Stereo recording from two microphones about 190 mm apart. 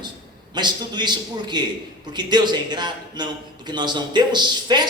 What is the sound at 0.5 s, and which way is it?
Speech, 25° right (ahead or behind).